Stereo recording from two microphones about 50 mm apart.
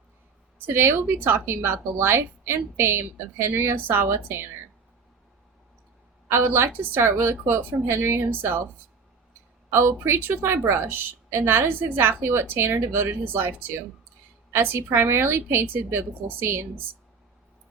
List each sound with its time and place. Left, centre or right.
0.7 s a woman's voice: right
6.2 s a woman's voice: right
9.6 s a woman's voice: right
10.8 s a woman's voice: right